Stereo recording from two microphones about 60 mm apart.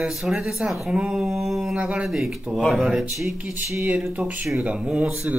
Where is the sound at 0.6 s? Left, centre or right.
Centre.